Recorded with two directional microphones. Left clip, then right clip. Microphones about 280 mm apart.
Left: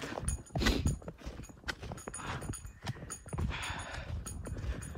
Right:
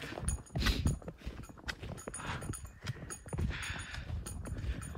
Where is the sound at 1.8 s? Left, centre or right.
Centre.